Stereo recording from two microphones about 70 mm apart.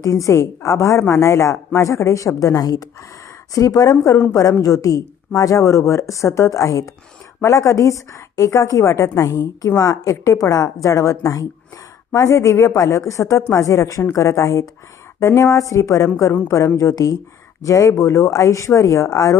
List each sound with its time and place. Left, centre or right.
0.0 s a woman's voice: left